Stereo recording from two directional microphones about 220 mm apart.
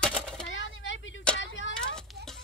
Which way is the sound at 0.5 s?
60° left (ahead or behind).